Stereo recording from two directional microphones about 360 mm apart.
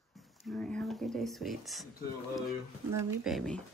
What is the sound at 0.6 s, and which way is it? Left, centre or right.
Speech, centre.